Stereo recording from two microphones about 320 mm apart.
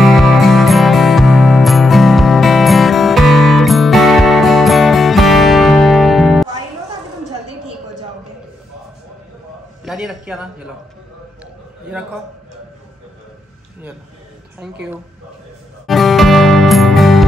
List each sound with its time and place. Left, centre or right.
0.0 s music: centre
9.8 s a sound: centre
15.9 s music: centre